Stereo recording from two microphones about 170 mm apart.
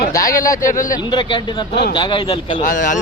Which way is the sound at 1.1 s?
25° left (ahead or behind).